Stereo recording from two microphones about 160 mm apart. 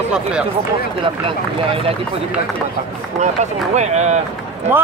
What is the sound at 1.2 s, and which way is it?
Speech, 35° right (ahead or behind).